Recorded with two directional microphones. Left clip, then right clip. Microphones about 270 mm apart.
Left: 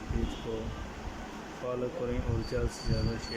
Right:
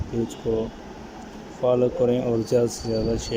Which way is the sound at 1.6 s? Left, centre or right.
Centre.